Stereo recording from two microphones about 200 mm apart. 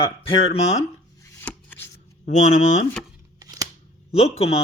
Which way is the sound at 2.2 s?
40° left (ahead or behind).